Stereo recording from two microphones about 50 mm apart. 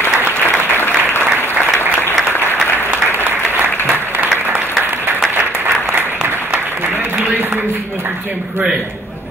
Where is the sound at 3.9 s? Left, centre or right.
Right.